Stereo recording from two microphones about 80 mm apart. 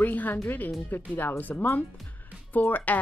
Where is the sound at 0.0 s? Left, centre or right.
Left.